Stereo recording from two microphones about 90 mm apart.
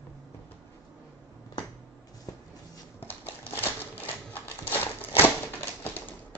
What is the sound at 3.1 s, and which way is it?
Typewriter, 20° left (ahead or behind).